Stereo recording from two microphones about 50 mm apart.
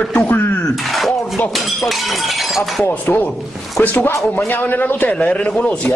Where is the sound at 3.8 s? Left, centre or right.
Left.